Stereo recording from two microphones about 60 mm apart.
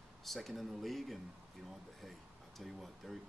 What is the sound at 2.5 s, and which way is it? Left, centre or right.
Speech, centre.